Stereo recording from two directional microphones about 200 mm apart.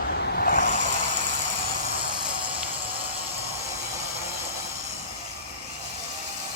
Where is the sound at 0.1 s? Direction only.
55° left (ahead or behind); by 0.9 s 40° left (ahead or behind).